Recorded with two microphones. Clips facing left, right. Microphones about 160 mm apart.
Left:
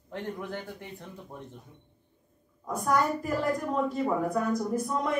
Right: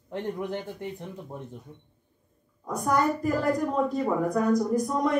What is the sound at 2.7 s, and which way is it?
Speech, centre (ahead or behind).